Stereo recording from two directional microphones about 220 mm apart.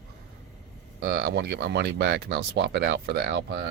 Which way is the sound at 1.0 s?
45° right (ahead or behind).